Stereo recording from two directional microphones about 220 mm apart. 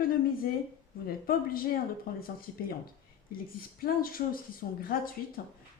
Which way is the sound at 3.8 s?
40° left (ahead or behind).